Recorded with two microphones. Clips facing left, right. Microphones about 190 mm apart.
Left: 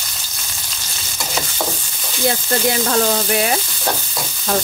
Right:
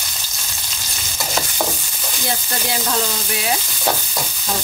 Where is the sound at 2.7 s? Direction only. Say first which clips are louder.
Left 4 dB; 55° left (ahead or behind).